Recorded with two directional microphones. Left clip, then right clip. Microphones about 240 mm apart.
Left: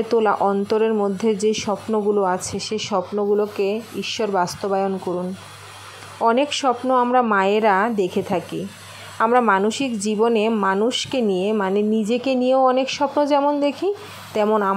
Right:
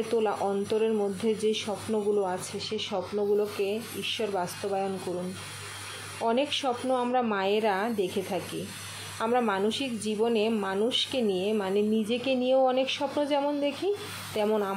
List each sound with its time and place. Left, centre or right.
0.1 s speech: left
6.2 s speech: left